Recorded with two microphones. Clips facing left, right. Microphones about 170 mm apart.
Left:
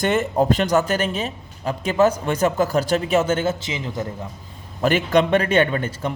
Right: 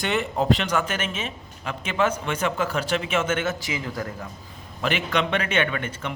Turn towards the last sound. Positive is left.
turn(degrees=35)  # may be behind; listen again after turning